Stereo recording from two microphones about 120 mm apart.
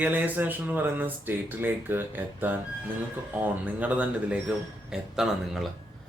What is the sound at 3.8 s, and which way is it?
Speech, 10° right (ahead or behind).